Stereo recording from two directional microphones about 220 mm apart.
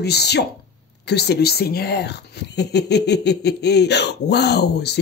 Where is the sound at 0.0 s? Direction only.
50° left (ahead or behind).